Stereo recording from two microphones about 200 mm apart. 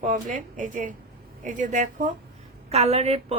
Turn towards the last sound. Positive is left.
turn(degrees=-30)  # may be behind; listen again after turning